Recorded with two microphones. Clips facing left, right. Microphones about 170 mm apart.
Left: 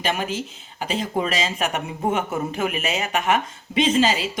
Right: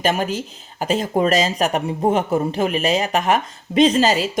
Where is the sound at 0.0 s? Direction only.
45° right (ahead or behind).